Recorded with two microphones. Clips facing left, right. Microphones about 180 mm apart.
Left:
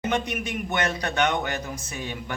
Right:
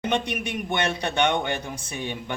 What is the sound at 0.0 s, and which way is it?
A man's voice, 30° right (ahead or behind).